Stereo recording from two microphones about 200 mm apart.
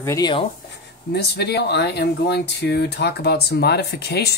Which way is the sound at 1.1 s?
55° left (ahead or behind).